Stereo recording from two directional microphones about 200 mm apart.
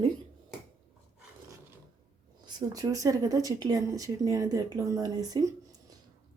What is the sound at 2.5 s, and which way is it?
Speech, 20° right (ahead or behind).